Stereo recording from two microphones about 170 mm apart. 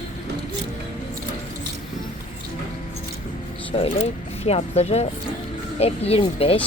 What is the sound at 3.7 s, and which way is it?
A woman's voice, 30° left (ahead or behind).